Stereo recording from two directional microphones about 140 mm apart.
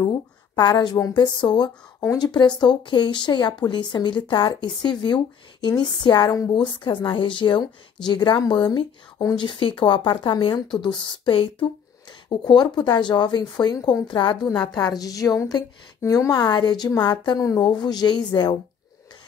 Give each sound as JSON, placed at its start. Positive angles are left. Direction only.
{"t": 0.0, "sound": "a woman's voice", "side_deg": 30}